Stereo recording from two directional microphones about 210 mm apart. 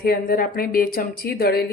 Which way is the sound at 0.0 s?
45° left (ahead or behind).